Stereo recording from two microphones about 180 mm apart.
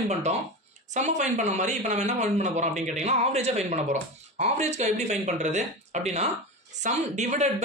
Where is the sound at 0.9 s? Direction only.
40° right (ahead or behind).